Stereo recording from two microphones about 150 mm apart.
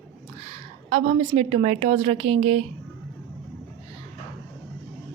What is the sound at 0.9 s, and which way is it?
A woman's voice, 45° right (ahead or behind).